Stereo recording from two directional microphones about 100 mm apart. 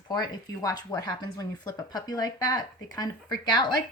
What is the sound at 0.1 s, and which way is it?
A woman's voice, 40° left (ahead or behind).